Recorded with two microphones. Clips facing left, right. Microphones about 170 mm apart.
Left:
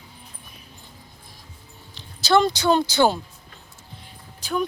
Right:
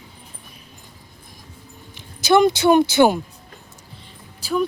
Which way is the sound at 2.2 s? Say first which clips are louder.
Right 4 dB; 20° right (ahead or behind).